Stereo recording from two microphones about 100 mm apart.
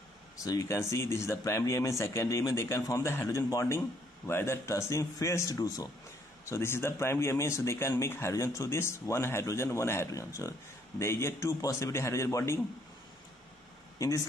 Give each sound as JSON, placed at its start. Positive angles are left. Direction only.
{"t": 0.4, "sound": "speech", "side_deg": 35}
{"t": 13.9, "sound": "speech", "side_deg": 30}